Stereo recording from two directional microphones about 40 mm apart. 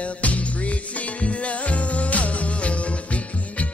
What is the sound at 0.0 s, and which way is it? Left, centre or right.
Music, left.